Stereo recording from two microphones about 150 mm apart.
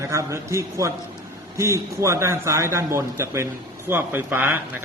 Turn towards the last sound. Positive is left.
turn(degrees=-10)  # may be behind; listen again after turning